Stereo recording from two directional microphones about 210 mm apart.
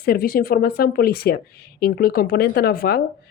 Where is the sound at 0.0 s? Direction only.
45° left (ahead or behind).